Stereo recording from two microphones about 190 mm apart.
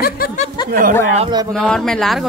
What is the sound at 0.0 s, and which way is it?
Speech, 50° left (ahead or behind).